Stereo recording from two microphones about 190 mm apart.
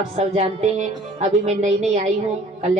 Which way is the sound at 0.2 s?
35° right (ahead or behind).